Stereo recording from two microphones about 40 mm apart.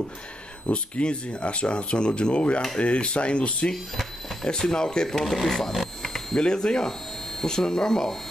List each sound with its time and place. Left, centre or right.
0.7 s speech: left
3.7 s speech: centre
4.5 s speech: centre
6.0 s a sound: centre
6.4 s speech: centre